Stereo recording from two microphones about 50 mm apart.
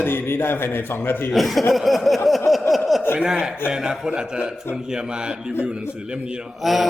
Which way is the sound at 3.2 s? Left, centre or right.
Centre.